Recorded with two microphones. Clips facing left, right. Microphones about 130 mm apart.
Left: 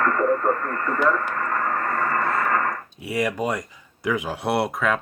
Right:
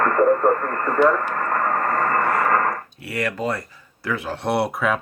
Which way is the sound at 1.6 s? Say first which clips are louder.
Right 5 dB; 45° right (ahead or behind).